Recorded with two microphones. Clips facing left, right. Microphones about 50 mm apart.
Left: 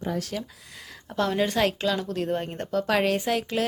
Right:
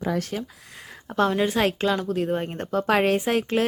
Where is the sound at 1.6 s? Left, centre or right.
Right.